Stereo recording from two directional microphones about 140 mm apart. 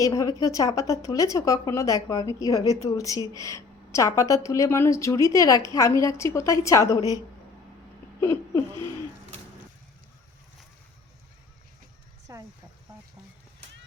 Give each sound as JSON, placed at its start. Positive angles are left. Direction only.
{"t": 0.0, "sound": "a woman's voice", "side_deg": 25}
{"t": 8.2, "sound": "a woman's voice", "side_deg": 20}
{"t": 12.3, "sound": "a sound", "side_deg": -25}